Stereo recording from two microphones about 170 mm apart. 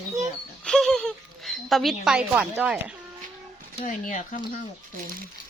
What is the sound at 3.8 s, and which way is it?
Speech, 50° left (ahead or behind).